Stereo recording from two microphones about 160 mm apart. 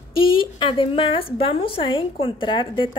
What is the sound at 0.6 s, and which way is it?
A woman's voice, 35° left (ahead or behind).